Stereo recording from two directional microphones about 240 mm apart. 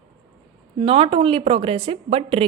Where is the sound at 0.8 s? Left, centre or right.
Right.